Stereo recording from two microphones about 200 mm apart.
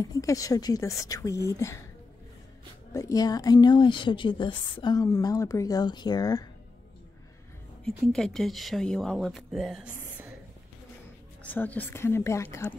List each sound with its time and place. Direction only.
0.0 s speech: 15° left (ahead or behind)
2.9 s a woman's voice: 15° left (ahead or behind)
8.0 s speech: centre (ahead or behind)
11.5 s speech: 10° left (ahead or behind)